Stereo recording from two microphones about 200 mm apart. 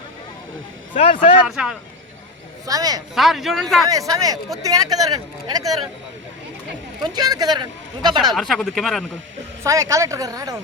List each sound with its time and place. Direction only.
0.9 s speech: 35° left (ahead or behind)
1.5 s speech: centre (ahead or behind)
2.6 s speech: 20° right (ahead or behind)
3.2 s speech: centre (ahead or behind)
3.8 s speech: 15° right (ahead or behind)
7.0 s speech: 20° right (ahead or behind)
8.2 s speech: centre (ahead or behind)
9.6 s speech: 15° right (ahead or behind)